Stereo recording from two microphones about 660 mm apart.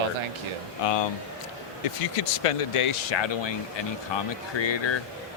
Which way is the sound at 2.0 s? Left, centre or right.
Left.